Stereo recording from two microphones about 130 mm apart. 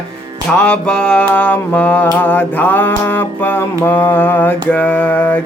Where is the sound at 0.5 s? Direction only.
10° left (ahead or behind).